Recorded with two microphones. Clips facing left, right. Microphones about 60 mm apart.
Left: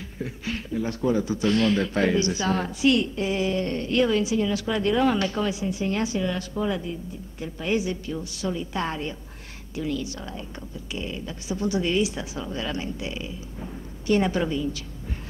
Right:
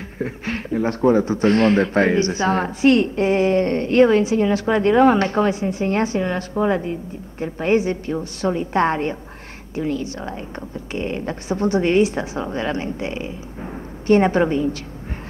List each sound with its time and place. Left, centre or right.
0.2 s a woman's voice: right